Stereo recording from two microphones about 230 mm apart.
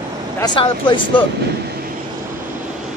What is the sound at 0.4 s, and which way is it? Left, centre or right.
Speech, left.